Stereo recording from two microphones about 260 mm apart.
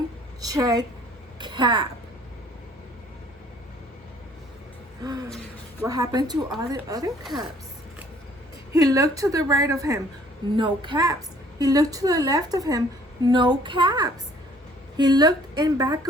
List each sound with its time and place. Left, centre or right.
0.4 s a woman's voice: centre
5.8 s a woman's voice: centre
8.7 s a woman's voice: centre